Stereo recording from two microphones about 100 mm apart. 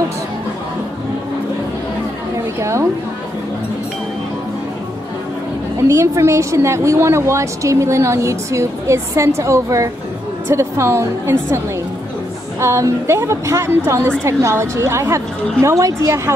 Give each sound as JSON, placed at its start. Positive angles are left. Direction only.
{"t": 2.6, "sound": "a sound", "side_deg": -30}
{"t": 5.9, "sound": "a woman's voice", "side_deg": -30}
{"t": 12.5, "sound": "a woman's voice", "side_deg": -30}